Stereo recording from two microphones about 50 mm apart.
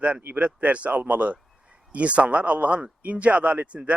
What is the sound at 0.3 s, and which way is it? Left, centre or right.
Speech, right.